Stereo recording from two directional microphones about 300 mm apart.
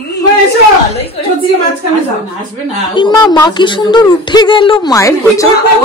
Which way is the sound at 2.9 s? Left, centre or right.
Centre.